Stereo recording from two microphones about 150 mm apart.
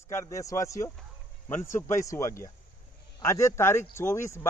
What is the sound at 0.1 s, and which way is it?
Speech, 20° left (ahead or behind).